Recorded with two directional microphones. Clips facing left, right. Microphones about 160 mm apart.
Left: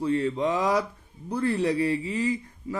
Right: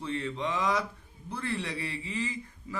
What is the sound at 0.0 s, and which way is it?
A man's voice, 35° left (ahead or behind).